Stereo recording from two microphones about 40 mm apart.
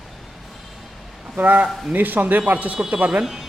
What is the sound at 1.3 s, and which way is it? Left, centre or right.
A man's voice, right.